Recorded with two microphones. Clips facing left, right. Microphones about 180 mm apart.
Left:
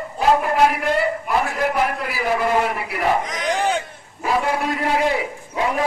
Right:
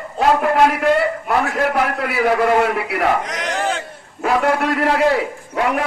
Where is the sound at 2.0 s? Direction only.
65° right (ahead or behind).